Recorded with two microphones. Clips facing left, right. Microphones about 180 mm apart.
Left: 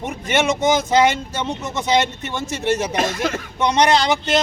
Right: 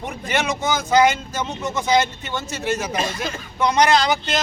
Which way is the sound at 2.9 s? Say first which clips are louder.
Left 4 dB; 80° left.